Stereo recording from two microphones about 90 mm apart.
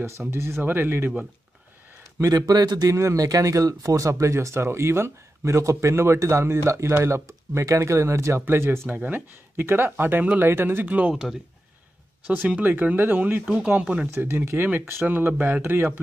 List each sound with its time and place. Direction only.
0.3 s speech: 30° right (ahead or behind)
2.1 s speech: 40° right (ahead or behind)
2.9 s speech: 35° right (ahead or behind); by 11.2 s 15° right (ahead or behind)
12.3 s speech: 20° right (ahead or behind)
14.1 s speech: 30° right (ahead or behind)